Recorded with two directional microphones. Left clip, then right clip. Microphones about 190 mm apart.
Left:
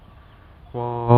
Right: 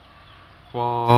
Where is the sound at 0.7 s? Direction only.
25° right (ahead or behind).